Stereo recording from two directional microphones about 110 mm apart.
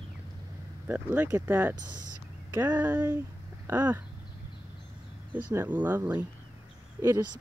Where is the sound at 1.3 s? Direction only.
30° right (ahead or behind).